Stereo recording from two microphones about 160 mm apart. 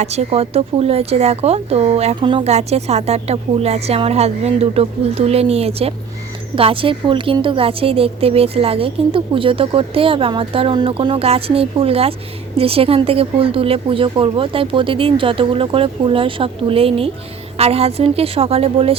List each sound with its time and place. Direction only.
0.0 s speech: 40° right (ahead or behind)